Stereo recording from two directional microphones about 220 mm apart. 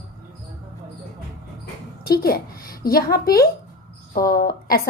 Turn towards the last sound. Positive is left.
turn(degrees=40)  # may be behind; listen again after turning